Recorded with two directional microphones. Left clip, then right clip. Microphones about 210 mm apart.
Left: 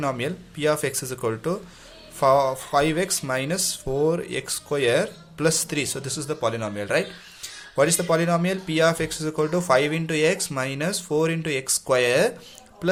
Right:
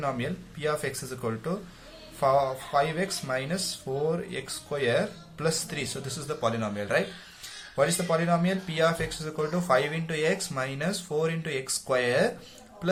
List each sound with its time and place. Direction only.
0.0 s a man's voice: 40° left (ahead or behind)